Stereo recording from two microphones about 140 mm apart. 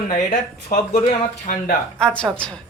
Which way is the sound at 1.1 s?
60° left (ahead or behind).